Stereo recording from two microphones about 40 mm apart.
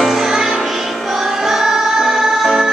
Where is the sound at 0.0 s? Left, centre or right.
Centre.